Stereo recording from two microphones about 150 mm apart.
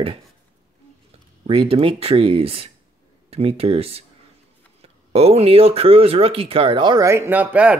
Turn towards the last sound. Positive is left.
turn(degrees=-10)  # may be behind; listen again after turning